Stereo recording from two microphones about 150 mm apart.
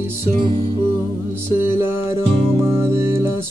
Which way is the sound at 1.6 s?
15° right (ahead or behind).